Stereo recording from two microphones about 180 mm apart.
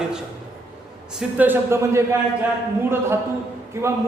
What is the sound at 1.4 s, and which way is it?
Speech, 10° right (ahead or behind).